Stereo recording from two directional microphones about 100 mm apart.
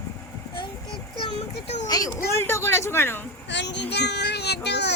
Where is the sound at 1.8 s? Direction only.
40° left (ahead or behind).